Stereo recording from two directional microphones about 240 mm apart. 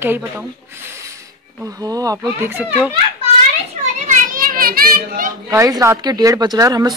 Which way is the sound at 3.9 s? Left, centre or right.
Right.